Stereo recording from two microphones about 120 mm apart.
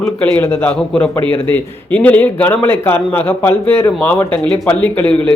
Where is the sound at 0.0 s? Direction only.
10° left (ahead or behind).